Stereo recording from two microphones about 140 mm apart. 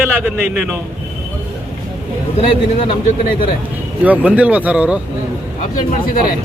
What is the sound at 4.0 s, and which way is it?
A man's voice, 10° right (ahead or behind).